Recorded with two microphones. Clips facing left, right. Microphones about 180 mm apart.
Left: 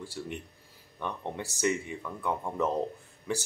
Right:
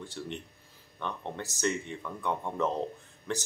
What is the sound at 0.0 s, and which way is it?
Speech, 10° left (ahead or behind).